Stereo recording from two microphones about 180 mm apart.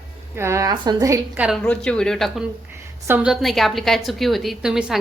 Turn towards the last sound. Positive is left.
turn(degrees=-5)  # may be behind; listen again after turning